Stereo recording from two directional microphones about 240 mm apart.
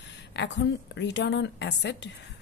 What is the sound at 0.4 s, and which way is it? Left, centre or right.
A woman's voice, left.